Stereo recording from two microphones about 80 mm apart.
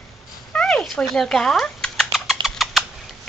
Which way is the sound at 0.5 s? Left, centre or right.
Centre.